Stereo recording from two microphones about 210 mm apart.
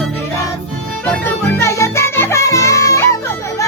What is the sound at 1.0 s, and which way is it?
Music, 10° left (ahead or behind).